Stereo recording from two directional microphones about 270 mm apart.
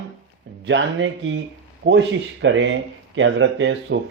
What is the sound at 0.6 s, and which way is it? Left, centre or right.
Speech, right.